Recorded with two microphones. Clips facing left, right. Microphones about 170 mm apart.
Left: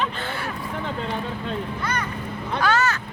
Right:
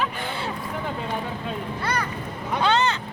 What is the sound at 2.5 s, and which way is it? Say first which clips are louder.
Speech: even; 20° right (ahead or behind).